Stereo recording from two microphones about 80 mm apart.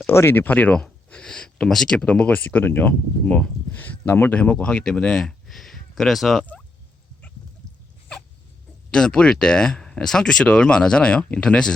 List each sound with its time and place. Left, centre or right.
0.1 s speech: left; by 6.4 s centre
8.9 s speech: centre